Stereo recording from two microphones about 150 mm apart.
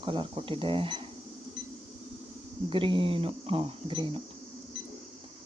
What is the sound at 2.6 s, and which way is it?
Speech, 35° right (ahead or behind).